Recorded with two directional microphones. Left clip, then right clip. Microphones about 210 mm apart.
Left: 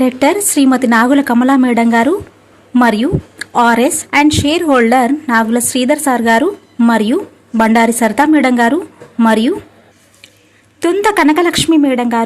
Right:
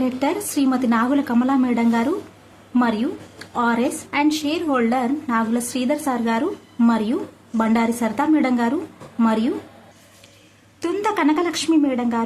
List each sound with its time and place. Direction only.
0.0 s a woman's voice: 30° left (ahead or behind)
10.8 s a woman's voice: 30° left (ahead or behind)